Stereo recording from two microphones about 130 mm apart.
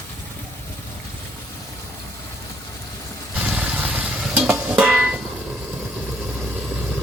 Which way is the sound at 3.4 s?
10° right (ahead or behind).